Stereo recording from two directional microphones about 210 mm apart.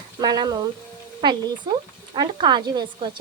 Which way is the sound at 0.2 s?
20° right (ahead or behind).